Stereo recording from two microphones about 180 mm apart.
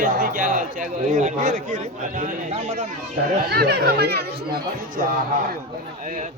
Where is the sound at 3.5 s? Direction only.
60° right (ahead or behind).